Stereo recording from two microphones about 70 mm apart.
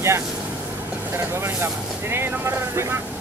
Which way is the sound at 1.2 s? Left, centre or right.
Right.